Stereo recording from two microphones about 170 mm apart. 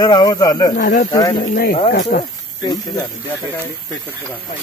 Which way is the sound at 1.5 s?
55° left (ahead or behind).